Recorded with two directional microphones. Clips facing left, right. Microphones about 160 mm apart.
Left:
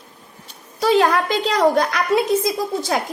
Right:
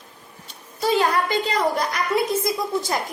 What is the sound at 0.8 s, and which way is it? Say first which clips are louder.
A woman's voice: left 4 dB; 85° left.